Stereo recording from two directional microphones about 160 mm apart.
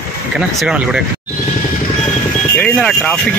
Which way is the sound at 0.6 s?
5° right (ahead or behind).